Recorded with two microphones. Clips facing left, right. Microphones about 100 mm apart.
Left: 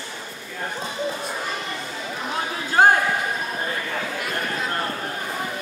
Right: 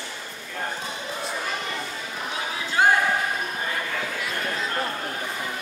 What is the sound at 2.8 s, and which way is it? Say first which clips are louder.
Basketball bounce: left 4 dB; 50° left (ahead or behind).